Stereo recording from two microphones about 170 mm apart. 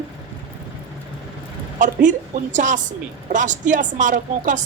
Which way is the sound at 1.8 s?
50° right (ahead or behind).